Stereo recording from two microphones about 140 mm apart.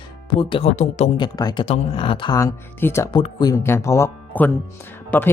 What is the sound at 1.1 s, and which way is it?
Speech, 30° left (ahead or behind).